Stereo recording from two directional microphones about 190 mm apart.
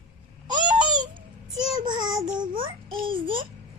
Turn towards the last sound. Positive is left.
turn(degrees=-25)  # may be behind; listen again after turning